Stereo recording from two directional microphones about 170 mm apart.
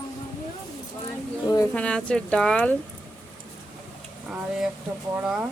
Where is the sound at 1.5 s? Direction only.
15° left (ahead or behind).